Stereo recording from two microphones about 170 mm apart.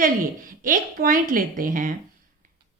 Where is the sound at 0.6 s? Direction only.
55° right (ahead or behind).